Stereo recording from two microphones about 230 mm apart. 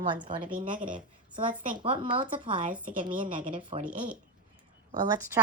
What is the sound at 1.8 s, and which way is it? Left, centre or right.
Speech, right.